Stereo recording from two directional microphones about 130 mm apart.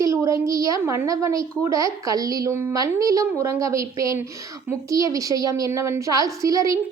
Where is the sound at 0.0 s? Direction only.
25° right (ahead or behind).